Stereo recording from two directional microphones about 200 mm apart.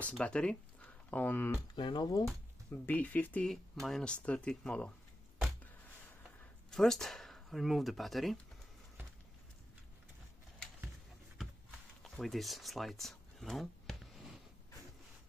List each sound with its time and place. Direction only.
0.0 s speech: 5° left (ahead or behind)
1.8 s speech: 25° left (ahead or behind)
2.7 s speech: 10° left (ahead or behind)
6.7 s speech: centre (ahead or behind)
12.0 s a sound: centre (ahead or behind)